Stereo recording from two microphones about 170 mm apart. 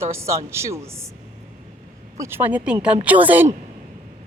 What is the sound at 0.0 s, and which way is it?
A woman's voice, 15° right (ahead or behind).